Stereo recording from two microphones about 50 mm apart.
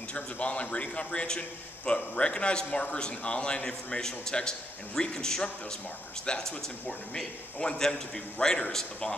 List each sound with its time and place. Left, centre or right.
0.1 s a man's voice: left